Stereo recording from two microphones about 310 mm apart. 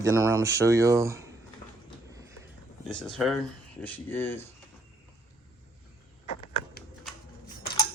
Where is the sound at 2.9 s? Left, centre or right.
Centre.